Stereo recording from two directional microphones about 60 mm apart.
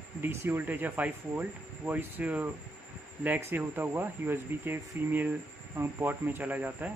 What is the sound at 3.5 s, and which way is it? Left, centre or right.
Speech, right.